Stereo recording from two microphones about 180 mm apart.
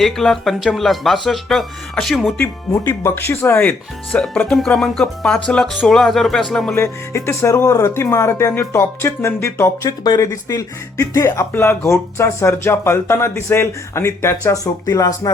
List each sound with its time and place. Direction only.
0.0 s speech: centre (ahead or behind)
2.4 s speech: 15° left (ahead or behind)
6.7 s speech: 15° left (ahead or behind)